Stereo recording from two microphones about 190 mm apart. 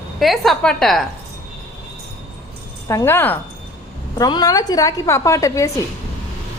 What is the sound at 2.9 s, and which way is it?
A woman's voice, 15° left (ahead or behind).